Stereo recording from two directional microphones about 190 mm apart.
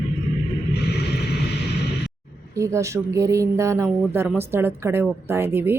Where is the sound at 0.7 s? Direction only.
60° left (ahead or behind).